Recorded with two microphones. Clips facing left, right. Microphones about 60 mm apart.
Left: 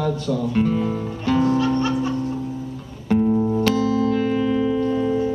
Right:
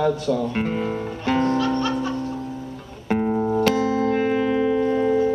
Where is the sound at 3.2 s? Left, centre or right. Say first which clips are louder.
Left 2 dB; right.